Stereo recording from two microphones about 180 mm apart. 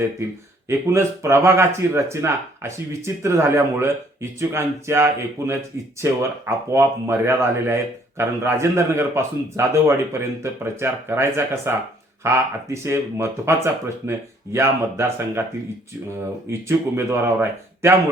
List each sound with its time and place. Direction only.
0.7 s speech: 15° right (ahead or behind)
16.5 s speech: 15° right (ahead or behind)